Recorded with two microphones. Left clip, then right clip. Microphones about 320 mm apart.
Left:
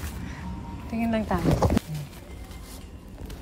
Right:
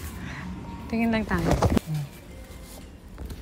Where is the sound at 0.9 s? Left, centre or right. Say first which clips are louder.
Right 1 dB; centre.